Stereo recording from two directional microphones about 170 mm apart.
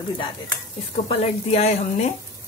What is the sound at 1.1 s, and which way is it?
Speech, 40° left (ahead or behind).